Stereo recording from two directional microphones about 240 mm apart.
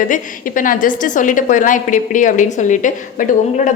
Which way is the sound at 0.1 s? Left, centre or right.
Left.